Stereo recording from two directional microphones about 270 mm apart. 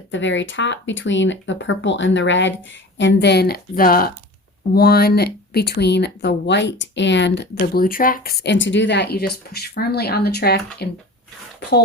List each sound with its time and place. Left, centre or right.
0.1 s speech: left